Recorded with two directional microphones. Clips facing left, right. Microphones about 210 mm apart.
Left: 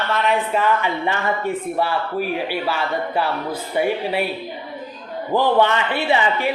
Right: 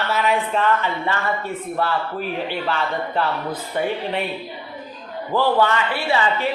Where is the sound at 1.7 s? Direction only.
10° left (ahead or behind).